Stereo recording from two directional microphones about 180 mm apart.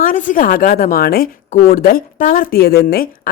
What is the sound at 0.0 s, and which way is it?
A woman's voice, 45° left (ahead or behind).